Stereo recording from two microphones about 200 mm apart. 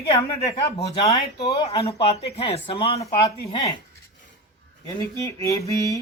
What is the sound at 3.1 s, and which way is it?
Speech, 20° left (ahead or behind).